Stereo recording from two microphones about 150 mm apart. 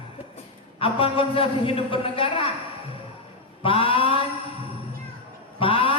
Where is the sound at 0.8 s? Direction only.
35° left (ahead or behind).